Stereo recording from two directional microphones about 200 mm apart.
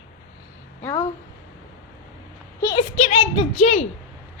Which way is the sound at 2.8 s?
30° left (ahead or behind).